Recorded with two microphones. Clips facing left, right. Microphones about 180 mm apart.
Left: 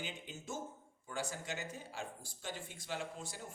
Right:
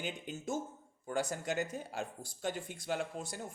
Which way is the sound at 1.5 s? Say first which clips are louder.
Right 7 dB; 55° right (ahead or behind).